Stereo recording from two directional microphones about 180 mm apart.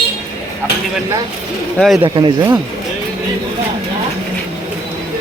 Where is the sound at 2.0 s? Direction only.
25° right (ahead or behind).